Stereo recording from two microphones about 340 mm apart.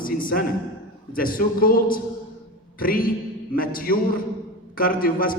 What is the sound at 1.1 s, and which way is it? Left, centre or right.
A man's voice, left.